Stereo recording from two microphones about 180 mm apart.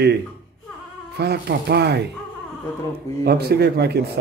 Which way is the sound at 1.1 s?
65° right (ahead or behind).